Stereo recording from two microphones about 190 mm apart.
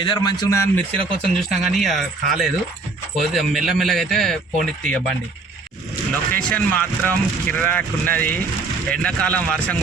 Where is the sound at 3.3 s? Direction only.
Centre (ahead or behind).